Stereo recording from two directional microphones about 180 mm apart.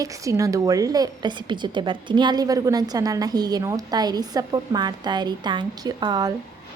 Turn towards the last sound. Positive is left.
turn(degrees=-25)  # may be behind; listen again after turning